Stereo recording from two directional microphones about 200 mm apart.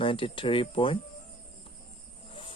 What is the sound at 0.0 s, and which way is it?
Speech, 25° left (ahead or behind).